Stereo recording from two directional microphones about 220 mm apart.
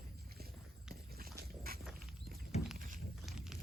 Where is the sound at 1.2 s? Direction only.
40° right (ahead or behind).